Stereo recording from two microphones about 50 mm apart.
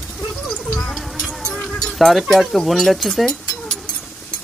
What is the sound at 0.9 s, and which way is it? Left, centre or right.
Music, centre.